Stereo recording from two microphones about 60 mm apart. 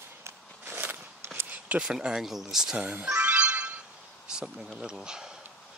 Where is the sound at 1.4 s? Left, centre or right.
Right.